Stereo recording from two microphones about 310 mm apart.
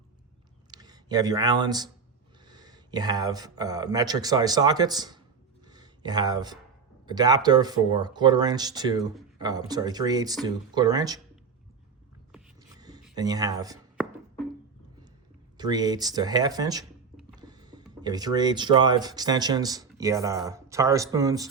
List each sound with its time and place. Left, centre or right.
0.7 s speech: centre
5.6 s a sound: centre
7.1 s speech: centre
12.3 s vehicle: centre
13.1 s speech: centre
15.5 s speech: centre